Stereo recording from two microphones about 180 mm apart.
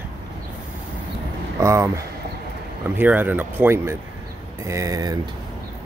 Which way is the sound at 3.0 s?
10° right (ahead or behind).